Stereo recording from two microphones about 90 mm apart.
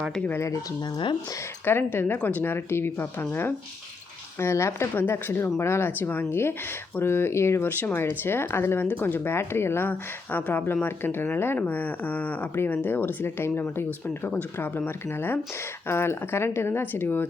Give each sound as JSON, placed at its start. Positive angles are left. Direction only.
{"t": 0.3, "sound": "speech", "side_deg": 30}
{"t": 1.6, "sound": "speech", "side_deg": 25}